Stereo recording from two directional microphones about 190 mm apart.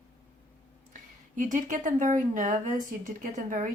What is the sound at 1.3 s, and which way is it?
Speech, 40° right (ahead or behind).